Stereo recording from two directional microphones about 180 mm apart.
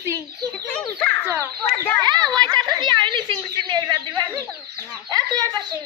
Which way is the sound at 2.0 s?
25° right (ahead or behind).